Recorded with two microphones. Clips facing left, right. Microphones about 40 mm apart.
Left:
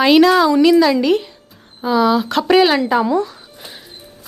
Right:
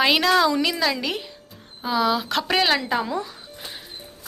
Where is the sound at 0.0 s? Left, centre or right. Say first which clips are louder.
Left 7 dB; centre.